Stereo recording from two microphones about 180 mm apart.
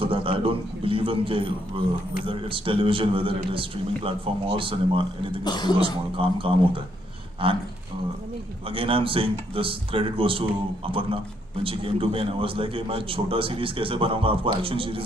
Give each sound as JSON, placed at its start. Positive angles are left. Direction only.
{"t": 0.0, "sound": "a man's voice", "side_deg": -30}
{"t": 5.4, "sound": "speech", "side_deg": 25}
{"t": 5.8, "sound": "a man's voice", "side_deg": -30}
{"t": 8.7, "sound": "a man's voice", "side_deg": -30}